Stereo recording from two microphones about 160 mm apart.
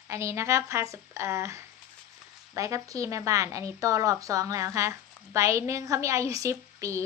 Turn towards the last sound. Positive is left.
turn(degrees=-20)  # may be behind; listen again after turning